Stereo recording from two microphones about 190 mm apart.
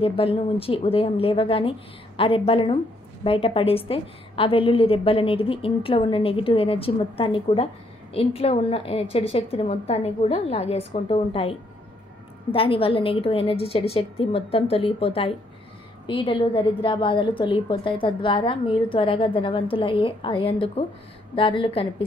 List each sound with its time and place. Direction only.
0.0 s a woman's voice: 30° left (ahead or behind)
12.5 s a woman's voice: 30° left (ahead or behind)